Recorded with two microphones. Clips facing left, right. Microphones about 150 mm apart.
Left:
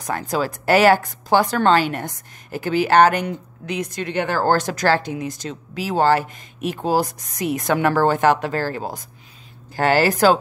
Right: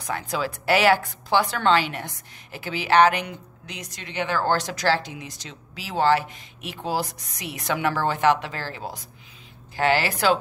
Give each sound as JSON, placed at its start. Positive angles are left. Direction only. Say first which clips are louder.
{"t": 0.0, "sound": "a woman's voice", "louder": "left 5 dB", "side_deg": 45}